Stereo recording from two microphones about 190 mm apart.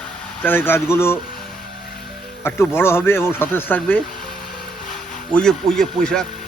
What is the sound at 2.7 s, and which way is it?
Speech, 10° left (ahead or behind).